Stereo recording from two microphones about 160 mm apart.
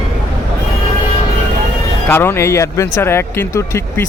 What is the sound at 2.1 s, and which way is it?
Speech, 15° left (ahead or behind).